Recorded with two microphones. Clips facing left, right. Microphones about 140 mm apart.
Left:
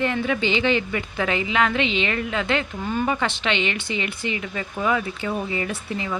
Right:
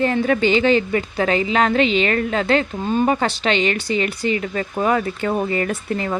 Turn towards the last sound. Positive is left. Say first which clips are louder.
# right 5 dB
turn(degrees=-50)  # may be behind; listen again after turning